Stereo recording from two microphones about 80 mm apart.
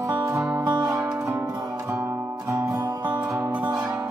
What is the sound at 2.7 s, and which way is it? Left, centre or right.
Music, right.